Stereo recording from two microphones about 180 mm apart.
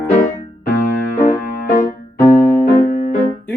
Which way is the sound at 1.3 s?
45° left (ahead or behind).